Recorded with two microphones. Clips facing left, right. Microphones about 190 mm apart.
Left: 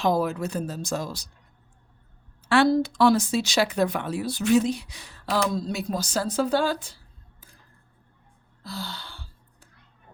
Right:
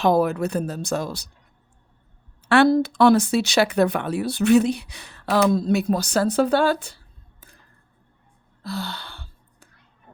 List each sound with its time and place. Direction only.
0.0 s speech: 60° right (ahead or behind)
2.5 s speech: 60° right (ahead or behind)
8.6 s gasp: 65° right (ahead or behind)